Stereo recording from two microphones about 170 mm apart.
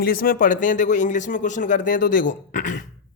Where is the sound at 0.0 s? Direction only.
60° left (ahead or behind).